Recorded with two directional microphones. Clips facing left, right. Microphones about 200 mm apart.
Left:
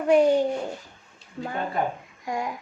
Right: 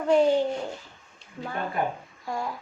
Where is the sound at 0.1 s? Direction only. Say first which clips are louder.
Left 2 dB; 15° left (ahead or behind).